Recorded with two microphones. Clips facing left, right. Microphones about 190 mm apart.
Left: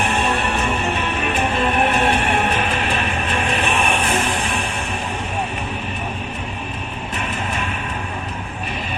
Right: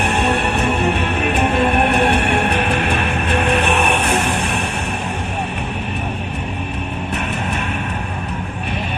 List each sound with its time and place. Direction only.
0.1 s music: 65° right (ahead or behind)